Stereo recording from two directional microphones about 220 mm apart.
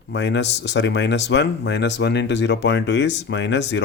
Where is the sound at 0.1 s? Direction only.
50° left (ahead or behind).